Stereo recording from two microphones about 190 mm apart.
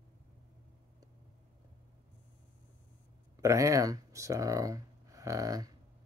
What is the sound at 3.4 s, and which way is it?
Speech, 15° right (ahead or behind).